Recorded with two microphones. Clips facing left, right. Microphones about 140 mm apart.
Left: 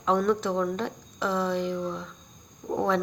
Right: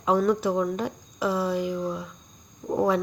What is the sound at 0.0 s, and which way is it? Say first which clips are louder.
A woman's voice: right 2 dB; 5° right (ahead or behind).